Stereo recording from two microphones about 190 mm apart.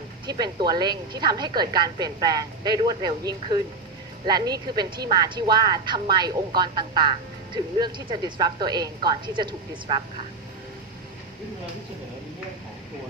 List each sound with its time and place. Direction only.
0.3 s a woman's voice: 20° right (ahead or behind)